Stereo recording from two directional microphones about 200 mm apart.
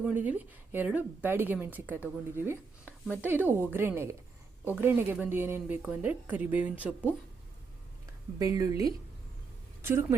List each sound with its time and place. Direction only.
0.0 s speech: 10° right (ahead or behind)
8.4 s speech: 15° right (ahead or behind)
9.8 s speech: 15° right (ahead or behind)